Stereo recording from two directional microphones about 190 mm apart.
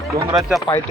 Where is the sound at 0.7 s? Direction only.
25° left (ahead or behind).